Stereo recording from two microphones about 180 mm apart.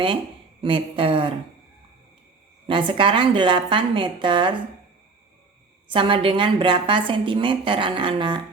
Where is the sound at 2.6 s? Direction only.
30° right (ahead or behind).